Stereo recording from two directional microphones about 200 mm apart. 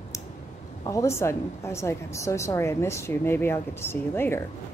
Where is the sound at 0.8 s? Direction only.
15° left (ahead or behind).